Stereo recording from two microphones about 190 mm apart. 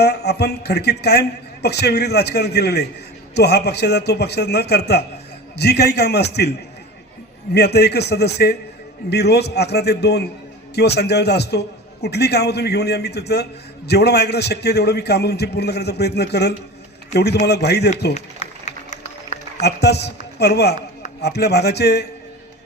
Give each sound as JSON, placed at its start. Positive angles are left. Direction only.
{"t": 0.0, "sound": "a man's voice", "side_deg": 60}
{"t": 7.5, "sound": "a man's voice", "side_deg": 60}
{"t": 18.1, "sound": "a sound", "side_deg": 40}
{"t": 19.6, "sound": "a man's voice", "side_deg": 60}